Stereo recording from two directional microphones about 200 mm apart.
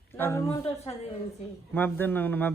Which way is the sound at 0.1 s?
10° left (ahead or behind).